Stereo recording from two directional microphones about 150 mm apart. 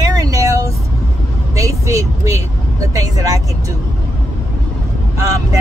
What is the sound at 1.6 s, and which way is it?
Speech, 20° right (ahead or behind).